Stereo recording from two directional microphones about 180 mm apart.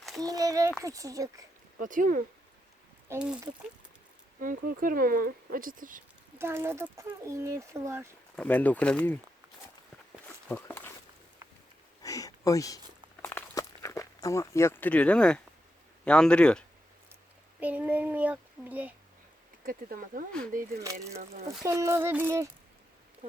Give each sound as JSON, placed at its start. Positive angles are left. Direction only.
{"t": 0.2, "sound": "a child's voice", "side_deg": -20}
{"t": 1.8, "sound": "speech", "side_deg": -45}
{"t": 3.1, "sound": "speech", "side_deg": -5}
{"t": 4.4, "sound": "speech", "side_deg": -50}
{"t": 6.4, "sound": "speech", "side_deg": -15}
{"t": 8.4, "sound": "speech", "side_deg": 10}
{"t": 10.2, "sound": "a sound", "side_deg": 10}
{"t": 12.0, "sound": "a sound", "side_deg": 20}
{"t": 13.2, "sound": "walk", "side_deg": 15}
{"t": 16.0, "sound": "speech", "side_deg": 5}
{"t": 17.6, "sound": "speech", "side_deg": -10}
{"t": 19.6, "sound": "speech", "side_deg": -50}
{"t": 21.6, "sound": "speech", "side_deg": -15}